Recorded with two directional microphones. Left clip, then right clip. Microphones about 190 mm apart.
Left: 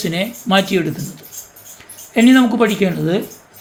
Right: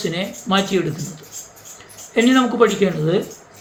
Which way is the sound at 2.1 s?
40° left (ahead or behind).